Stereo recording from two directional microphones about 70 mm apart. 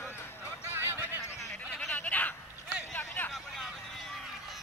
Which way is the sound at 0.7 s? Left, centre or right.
Right.